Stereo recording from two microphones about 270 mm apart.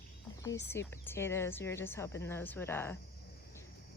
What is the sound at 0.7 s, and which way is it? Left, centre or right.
Speech, centre.